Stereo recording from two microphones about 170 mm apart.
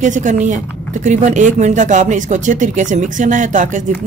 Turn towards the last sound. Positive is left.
turn(degrees=-50)  # may be behind; listen again after turning